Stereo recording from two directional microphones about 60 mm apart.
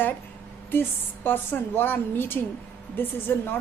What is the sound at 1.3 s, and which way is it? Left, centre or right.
A woman's voice, left.